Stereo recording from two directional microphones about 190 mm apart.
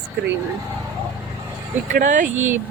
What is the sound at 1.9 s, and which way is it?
Speech, 45° right (ahead or behind).